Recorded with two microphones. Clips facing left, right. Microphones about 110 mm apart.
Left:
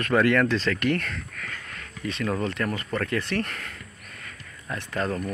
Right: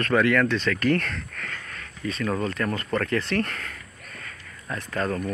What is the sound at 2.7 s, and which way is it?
Speech, 15° left (ahead or behind).